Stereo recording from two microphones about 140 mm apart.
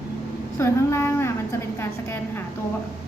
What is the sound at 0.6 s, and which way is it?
A woman's voice, 20° left (ahead or behind).